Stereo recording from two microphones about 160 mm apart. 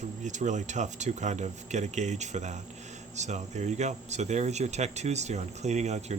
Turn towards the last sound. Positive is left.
turn(degrees=-45)  # may be behind; listen again after turning